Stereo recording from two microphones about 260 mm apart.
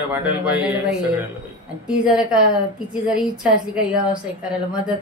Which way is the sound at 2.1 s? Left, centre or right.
Centre.